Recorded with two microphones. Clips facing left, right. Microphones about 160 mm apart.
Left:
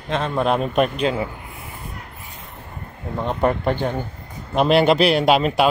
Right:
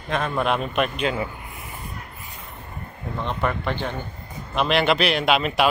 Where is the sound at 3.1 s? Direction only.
40° left (ahead or behind).